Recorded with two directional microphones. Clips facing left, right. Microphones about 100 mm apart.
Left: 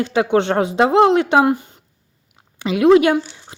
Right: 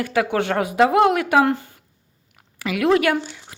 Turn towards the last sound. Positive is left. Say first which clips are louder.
# left 6 dB
turn(degrees=20)  # may be behind; listen again after turning